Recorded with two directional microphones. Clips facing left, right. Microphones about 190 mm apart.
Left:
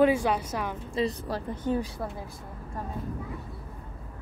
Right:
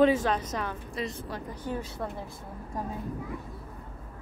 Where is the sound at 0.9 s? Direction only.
35° left (ahead or behind).